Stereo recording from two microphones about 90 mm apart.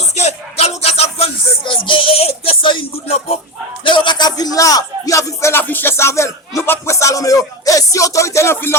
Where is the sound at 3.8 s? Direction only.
60° left (ahead or behind).